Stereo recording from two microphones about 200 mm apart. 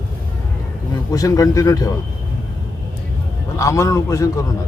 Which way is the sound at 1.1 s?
15° left (ahead or behind).